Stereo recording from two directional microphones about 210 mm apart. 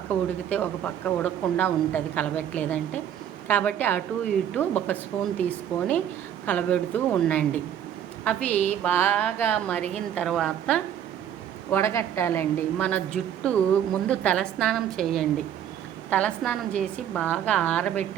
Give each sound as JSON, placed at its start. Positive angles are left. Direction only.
{"t": 0.1, "sound": "speech", "side_deg": 10}
{"t": 8.5, "sound": "mantra", "side_deg": 35}
{"t": 8.8, "sound": "a woman's voice", "side_deg": 10}